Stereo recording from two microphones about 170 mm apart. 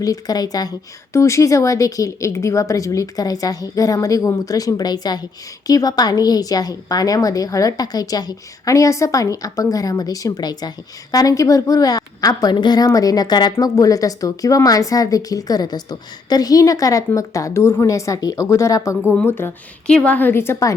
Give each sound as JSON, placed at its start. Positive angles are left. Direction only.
{"t": 0.0, "sound": "a woman's voice", "side_deg": 20}